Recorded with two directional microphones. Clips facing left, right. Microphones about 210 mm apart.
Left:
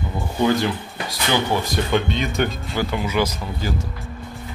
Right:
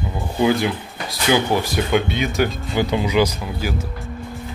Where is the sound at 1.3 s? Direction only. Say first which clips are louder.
Right 3 dB; 10° right (ahead or behind).